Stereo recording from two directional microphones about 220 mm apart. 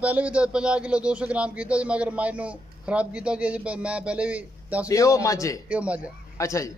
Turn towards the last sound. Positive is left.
turn(degrees=15)  # may be behind; listen again after turning